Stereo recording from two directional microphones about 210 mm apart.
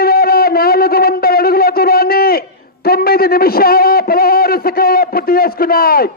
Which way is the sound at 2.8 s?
45° left (ahead or behind).